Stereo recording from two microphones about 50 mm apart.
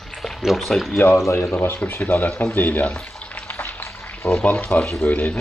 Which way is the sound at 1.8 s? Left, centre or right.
Left.